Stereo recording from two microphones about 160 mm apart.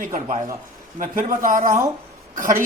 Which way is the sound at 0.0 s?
55° right (ahead or behind).